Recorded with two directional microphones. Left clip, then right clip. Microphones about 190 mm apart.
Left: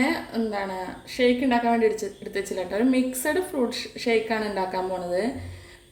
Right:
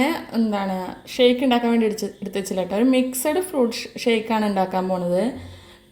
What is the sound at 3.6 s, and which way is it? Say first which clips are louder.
Speech: right 5 dB; 30° right (ahead or behind).